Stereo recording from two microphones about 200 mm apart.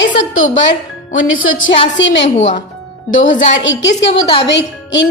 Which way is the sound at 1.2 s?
85° left.